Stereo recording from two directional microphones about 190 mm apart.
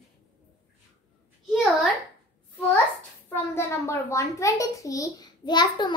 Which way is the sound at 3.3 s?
10° left (ahead or behind).